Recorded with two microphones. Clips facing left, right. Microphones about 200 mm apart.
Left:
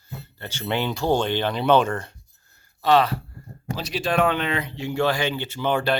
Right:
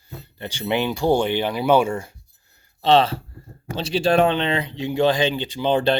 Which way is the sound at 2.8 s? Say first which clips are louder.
Right 2 dB; 25° right (ahead or behind).